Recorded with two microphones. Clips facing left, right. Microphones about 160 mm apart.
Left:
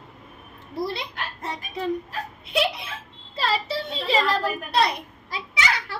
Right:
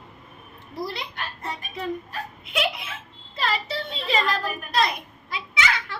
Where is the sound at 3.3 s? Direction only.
30° left (ahead or behind).